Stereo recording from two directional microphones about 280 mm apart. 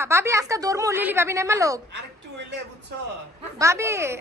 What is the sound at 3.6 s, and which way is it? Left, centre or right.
Speech, centre.